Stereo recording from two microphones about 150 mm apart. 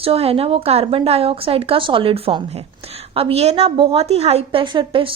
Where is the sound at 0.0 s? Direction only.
40° right (ahead or behind).